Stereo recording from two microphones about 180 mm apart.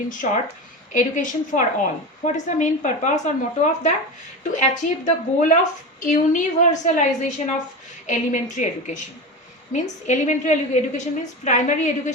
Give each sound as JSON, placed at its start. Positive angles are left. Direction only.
{"t": 0.1, "sound": "a woman's voice", "side_deg": 45}